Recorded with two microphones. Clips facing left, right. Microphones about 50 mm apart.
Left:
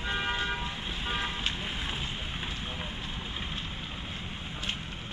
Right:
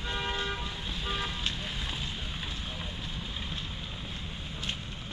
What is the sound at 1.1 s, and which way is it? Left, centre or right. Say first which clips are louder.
Vehicle: left 2 dB; left.